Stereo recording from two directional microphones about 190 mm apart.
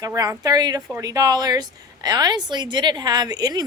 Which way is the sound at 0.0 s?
15° right (ahead or behind).